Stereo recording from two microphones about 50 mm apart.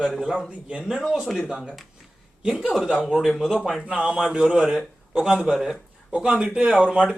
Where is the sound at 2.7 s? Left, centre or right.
Centre.